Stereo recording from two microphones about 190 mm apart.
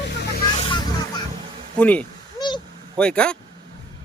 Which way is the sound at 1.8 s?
5° left (ahead or behind).